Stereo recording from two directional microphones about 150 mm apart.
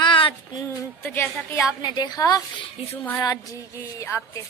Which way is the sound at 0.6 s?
15° left (ahead or behind).